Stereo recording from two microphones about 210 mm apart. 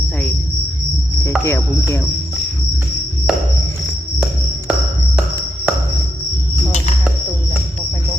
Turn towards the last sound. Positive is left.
turn(degrees=30)  # may be behind; listen again after turning